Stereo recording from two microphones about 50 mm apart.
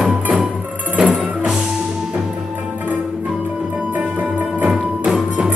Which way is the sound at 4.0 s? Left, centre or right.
Right.